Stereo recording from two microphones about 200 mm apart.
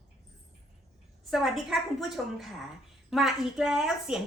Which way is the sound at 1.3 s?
Centre (ahead or behind).